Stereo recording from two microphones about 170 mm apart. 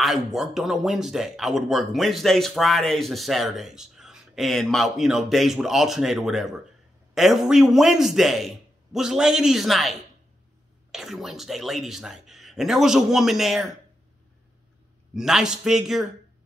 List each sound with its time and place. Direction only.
0.0 s speech: centre (ahead or behind)
15.1 s speech: 5° right (ahead or behind)